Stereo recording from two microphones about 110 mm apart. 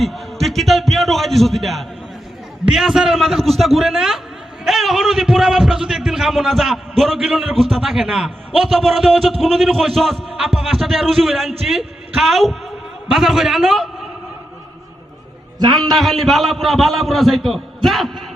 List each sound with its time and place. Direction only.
0.0 s a sound: centre (ahead or behind)
2.6 s a man's voice: 5° right (ahead or behind)
15.5 s a man's voice: 40° right (ahead or behind)
16.0 s a man's voice: centre (ahead or behind)